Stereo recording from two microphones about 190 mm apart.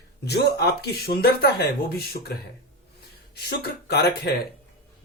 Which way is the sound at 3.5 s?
55° left (ahead or behind).